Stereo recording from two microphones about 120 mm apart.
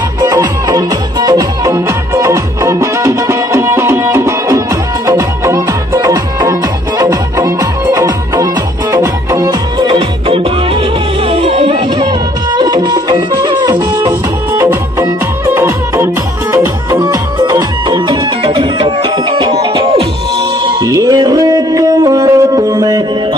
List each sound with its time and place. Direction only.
0.2 s music: 30° right (ahead or behind)
9.8 s music: 50° right (ahead or behind)
12.5 s music: 35° right (ahead or behind)
15.5 s music: 20° right (ahead or behind)
17.0 s music: 35° right (ahead or behind)
20.8 s music: 30° right (ahead or behind)